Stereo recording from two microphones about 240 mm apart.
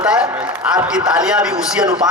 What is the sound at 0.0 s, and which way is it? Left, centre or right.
A man's voice, centre.